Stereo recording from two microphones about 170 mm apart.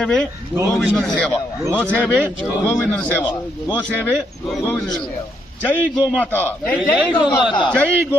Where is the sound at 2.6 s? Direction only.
10° left (ahead or behind).